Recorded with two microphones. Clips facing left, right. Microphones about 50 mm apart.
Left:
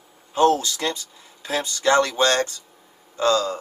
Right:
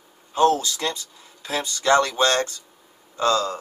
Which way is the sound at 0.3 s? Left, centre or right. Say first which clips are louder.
Left 1 dB; left.